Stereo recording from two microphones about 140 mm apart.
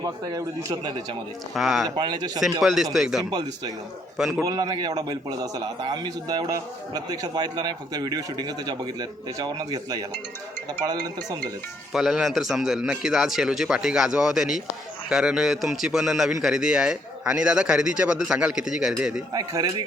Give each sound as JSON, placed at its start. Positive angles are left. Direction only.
{"t": 0.0, "sound": "a man's voice", "side_deg": -25}
{"t": 1.5, "sound": "a man's voice", "side_deg": 0}
{"t": 2.0, "sound": "speech", "side_deg": -30}
{"t": 2.4, "sound": "a man's voice", "side_deg": 0}
{"t": 3.2, "sound": "a man's voice", "side_deg": -30}
{"t": 11.9, "sound": "a man's voice", "side_deg": 0}
{"t": 19.3, "sound": "a man's voice", "side_deg": -25}